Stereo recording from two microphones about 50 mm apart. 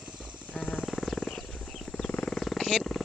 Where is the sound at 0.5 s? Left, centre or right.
Left.